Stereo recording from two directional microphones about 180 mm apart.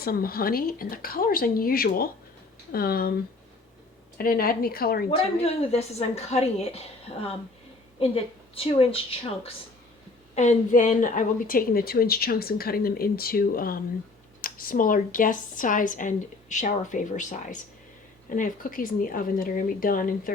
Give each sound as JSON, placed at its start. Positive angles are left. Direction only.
{"t": 0.0, "sound": "a woman's voice", "side_deg": 55}
{"t": 4.2, "sound": "a woman's voice", "side_deg": 55}
{"t": 5.1, "sound": "a woman's voice", "side_deg": 35}
{"t": 10.3, "sound": "a woman's voice", "side_deg": 45}